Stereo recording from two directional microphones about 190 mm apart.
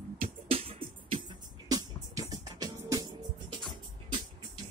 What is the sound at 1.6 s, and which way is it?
Music, 20° right (ahead or behind).